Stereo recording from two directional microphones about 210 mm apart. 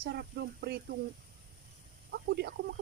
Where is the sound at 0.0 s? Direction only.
50° right (ahead or behind).